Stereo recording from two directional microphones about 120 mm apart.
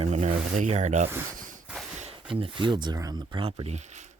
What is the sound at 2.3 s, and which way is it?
Speech, 45° right (ahead or behind).